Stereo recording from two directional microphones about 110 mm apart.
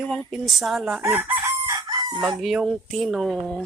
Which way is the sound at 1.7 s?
40° right (ahead or behind).